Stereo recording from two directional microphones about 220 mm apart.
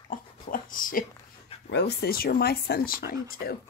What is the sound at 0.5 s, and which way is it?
Speech, 40° left (ahead or behind).